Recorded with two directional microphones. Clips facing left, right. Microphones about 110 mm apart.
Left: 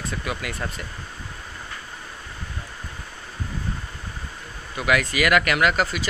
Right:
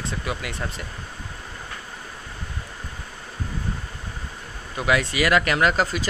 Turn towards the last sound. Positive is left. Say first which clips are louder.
# even
turn(degrees=-35)  # may be behind; listen again after turning